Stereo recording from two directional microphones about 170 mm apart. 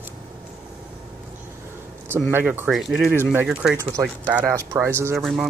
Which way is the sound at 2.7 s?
Centre (ahead or behind).